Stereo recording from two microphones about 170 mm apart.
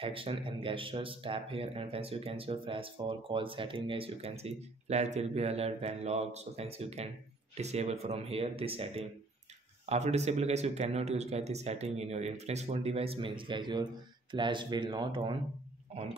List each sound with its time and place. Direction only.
0.0 s speech: 35° right (ahead or behind)